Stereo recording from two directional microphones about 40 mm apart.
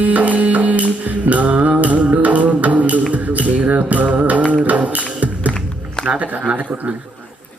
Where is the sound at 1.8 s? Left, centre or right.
Right.